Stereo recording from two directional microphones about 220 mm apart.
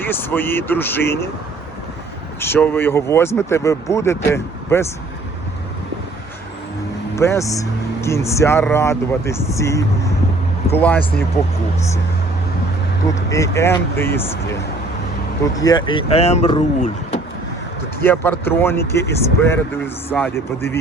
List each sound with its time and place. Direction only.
0.0 s speech: 10° left (ahead or behind)
2.4 s speech: 10° left (ahead or behind)
7.2 s speech: 15° left (ahead or behind)
13.3 s speech: 15° left (ahead or behind); by 17.2 s 30° left (ahead or behind)
18.0 s speech: 10° left (ahead or behind)